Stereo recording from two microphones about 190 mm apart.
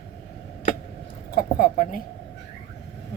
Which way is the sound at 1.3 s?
45° left (ahead or behind).